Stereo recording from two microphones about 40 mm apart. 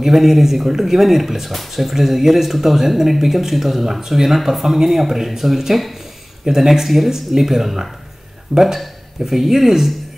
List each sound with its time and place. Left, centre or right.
0.0 s speech: centre
9.2 s speech: centre